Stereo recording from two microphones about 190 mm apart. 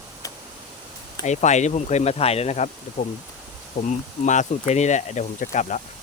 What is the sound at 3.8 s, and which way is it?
Speech, 40° left (ahead or behind).